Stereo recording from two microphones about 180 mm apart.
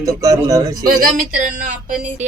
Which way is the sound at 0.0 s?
20° right (ahead or behind).